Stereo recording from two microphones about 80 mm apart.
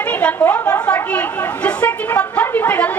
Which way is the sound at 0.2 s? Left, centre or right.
Centre.